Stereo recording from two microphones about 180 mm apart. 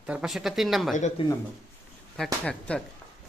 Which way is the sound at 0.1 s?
5° right (ahead or behind).